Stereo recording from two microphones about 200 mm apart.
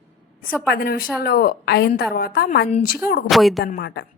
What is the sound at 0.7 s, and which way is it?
A woman's voice, 50° left (ahead or behind).